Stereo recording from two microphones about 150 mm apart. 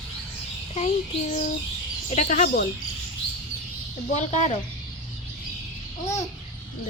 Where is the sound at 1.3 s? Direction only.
55° left (ahead or behind).